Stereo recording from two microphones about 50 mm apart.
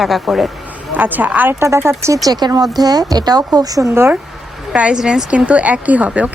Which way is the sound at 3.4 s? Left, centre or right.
Right.